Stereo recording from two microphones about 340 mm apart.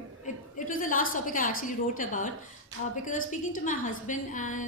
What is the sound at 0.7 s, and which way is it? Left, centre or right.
A woman's voice, left.